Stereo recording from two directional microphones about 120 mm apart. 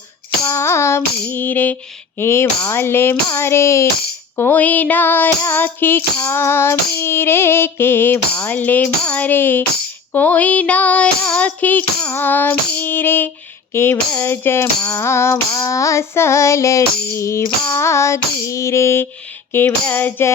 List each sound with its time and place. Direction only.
0.4 s music: 25° left (ahead or behind)
2.1 s female singing: 20° left (ahead or behind)
4.4 s music: 15° left (ahead or behind)
13.7 s female singing: 20° left (ahead or behind)
19.5 s music: 15° left (ahead or behind)